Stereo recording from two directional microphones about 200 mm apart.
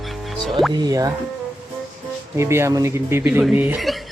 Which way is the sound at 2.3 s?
15° right (ahead or behind).